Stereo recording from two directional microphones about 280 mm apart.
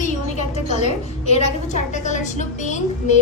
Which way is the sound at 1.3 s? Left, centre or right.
Left.